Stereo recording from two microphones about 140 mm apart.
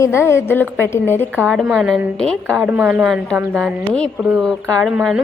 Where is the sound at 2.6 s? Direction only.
10° right (ahead or behind).